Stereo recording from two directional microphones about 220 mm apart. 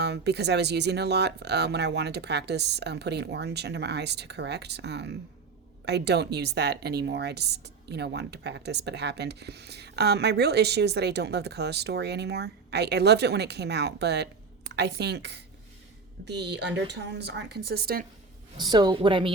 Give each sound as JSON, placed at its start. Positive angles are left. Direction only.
{"t": 0.0, "sound": "speech", "side_deg": -50}
{"t": 18.5, "sound": "a woman's voice", "side_deg": -20}